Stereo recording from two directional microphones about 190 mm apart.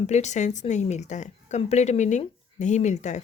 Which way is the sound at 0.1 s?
35° left (ahead or behind).